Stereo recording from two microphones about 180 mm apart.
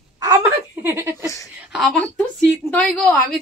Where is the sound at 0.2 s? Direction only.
15° right (ahead or behind).